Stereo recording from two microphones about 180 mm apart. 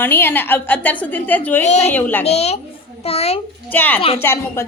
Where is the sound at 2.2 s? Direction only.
35° left (ahead or behind).